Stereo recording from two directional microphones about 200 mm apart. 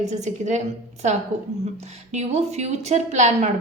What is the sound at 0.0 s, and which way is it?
Speech, 35° right (ahead or behind).